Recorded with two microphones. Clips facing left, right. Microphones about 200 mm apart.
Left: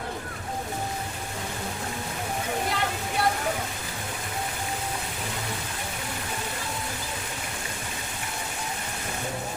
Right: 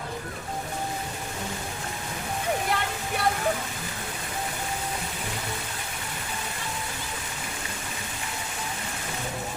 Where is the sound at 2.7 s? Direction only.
60° right (ahead or behind).